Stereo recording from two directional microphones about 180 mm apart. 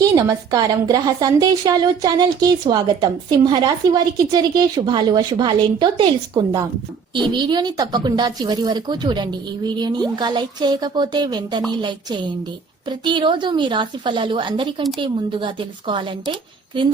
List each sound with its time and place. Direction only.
0.0 s a woman's voice: 20° right (ahead or behind)
12.9 s a woman's voice: 25° right (ahead or behind)